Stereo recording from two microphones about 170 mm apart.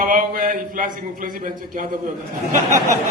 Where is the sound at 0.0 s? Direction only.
50° right (ahead or behind).